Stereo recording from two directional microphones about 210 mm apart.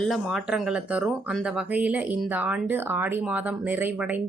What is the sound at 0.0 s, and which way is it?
A woman's voice, centre (ahead or behind).